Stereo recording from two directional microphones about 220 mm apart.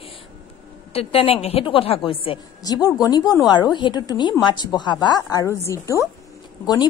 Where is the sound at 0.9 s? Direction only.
25° left (ahead or behind).